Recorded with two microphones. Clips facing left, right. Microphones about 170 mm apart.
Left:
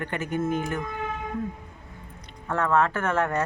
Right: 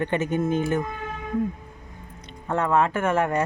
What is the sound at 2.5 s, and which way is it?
Speech, 15° right (ahead or behind).